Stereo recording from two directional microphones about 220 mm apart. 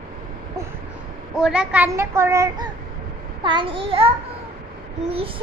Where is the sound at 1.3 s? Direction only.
5° right (ahead or behind).